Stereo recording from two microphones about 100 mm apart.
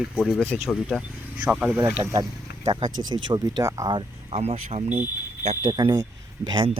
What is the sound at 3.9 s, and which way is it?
Speech, 80° right.